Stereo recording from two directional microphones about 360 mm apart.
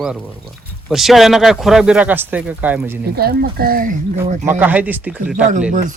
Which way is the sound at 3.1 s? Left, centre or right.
Right.